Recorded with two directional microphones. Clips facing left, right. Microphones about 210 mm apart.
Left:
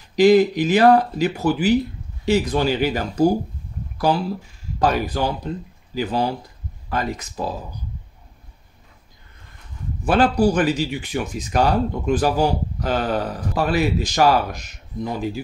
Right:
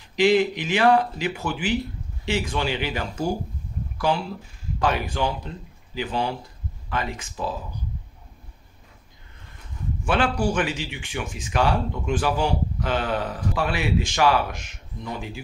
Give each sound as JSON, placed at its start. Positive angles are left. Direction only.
{"t": 0.1, "sound": "speech", "side_deg": 40}
{"t": 10.0, "sound": "speech", "side_deg": 40}